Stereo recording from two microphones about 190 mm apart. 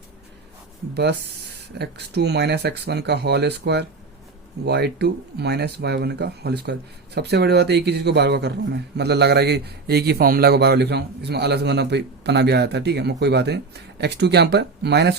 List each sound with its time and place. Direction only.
1.8 s speech: 60° right (ahead or behind)